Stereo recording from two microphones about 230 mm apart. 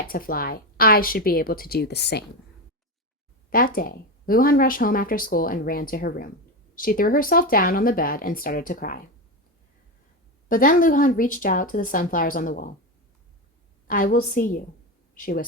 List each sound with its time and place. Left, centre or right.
0.0 s speech: left
3.5 s speech: left
10.5 s speech: left
13.8 s speech: left